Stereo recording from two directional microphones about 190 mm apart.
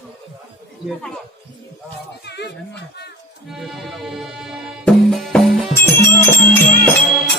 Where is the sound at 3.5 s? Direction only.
Centre (ahead or behind).